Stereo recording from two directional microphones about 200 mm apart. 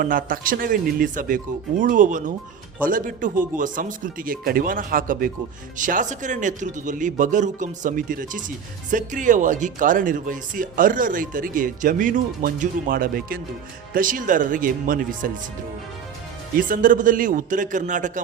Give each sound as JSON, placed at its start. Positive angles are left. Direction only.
{"t": 0.0, "sound": "speech", "side_deg": -45}
{"t": 16.6, "sound": "speech", "side_deg": -40}